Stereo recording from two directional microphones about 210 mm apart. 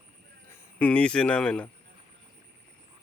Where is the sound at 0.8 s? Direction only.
5° left (ahead or behind).